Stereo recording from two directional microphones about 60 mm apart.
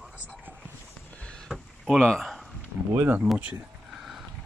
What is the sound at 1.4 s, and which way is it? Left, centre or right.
Rowboat, centre.